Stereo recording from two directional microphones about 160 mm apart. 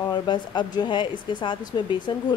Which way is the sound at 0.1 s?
25° left (ahead or behind).